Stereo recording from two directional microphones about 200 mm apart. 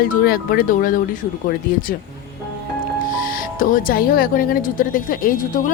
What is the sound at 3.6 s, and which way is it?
A woman's voice, 45° left (ahead or behind).